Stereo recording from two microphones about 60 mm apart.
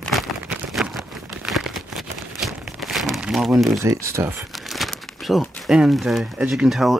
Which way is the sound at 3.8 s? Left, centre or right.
Right.